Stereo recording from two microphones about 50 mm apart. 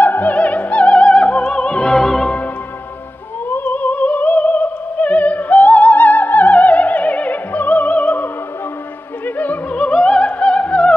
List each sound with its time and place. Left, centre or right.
0.0 s music: left; by 2.3 s centre
3.6 s opera: left
9.8 s opera: left